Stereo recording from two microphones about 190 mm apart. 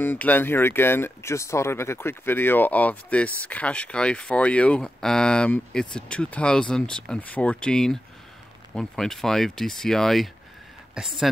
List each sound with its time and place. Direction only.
0.0 s speech: 10° left (ahead or behind)